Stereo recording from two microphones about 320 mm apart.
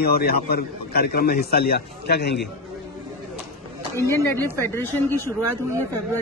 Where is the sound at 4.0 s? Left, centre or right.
Centre.